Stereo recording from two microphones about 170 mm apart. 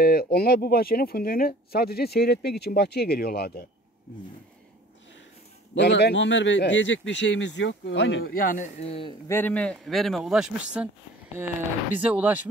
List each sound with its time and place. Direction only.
0.0 s speech: 65° left (ahead or behind)
5.8 s a man's voice: 85° left; by 8.6 s 55° left (ahead or behind)
8.8 s a man's voice: 35° left (ahead or behind)
9.3 s speech: 10° left (ahead or behind)
12.0 s speech: 10° right (ahead or behind)